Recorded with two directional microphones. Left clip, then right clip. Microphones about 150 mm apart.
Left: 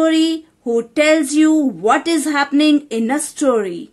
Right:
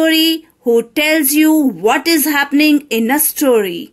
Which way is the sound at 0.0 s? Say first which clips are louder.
Right 3 dB; 10° right (ahead or behind).